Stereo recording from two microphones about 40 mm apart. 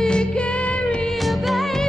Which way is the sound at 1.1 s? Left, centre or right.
Centre.